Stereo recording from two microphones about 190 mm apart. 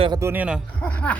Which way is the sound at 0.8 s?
5° left (ahead or behind).